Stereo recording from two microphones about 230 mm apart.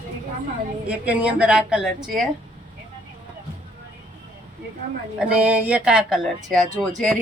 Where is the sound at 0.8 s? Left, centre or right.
Centre.